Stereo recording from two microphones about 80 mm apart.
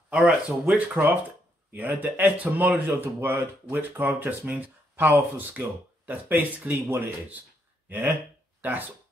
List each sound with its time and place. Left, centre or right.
0.1 s speech: centre